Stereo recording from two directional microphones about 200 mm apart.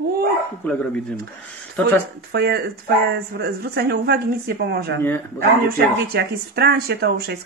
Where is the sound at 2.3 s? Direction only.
55° right (ahead or behind).